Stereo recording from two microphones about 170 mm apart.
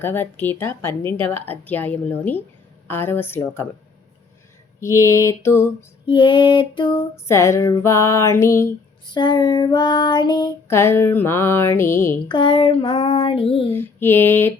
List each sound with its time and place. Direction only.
0.0 s speech: 10° left (ahead or behind)
4.8 s speech: 20° left (ahead or behind)
6.1 s child singing: 30° left (ahead or behind)
7.3 s speech: 15° left (ahead or behind)
9.0 s child singing: 25° left (ahead or behind)
10.7 s speech: 15° left (ahead or behind)
12.3 s child singing: 30° left (ahead or behind)
13.7 s speech: 15° left (ahead or behind)